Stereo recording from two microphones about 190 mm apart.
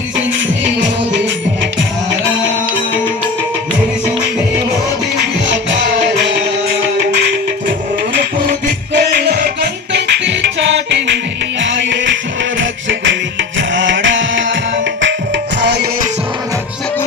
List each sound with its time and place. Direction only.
9.0 s music: 60° right (ahead or behind); by 14.6 s 75° right (ahead or behind)
15.6 s music: 65° right (ahead or behind)